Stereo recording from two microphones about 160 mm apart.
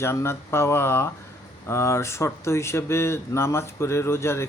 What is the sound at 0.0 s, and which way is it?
Speech, 15° left (ahead or behind).